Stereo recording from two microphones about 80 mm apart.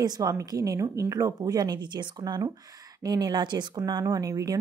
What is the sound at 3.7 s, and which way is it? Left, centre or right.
Speech, right.